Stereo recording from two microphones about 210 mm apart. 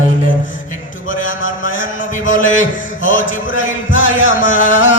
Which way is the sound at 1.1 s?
40° left (ahead or behind).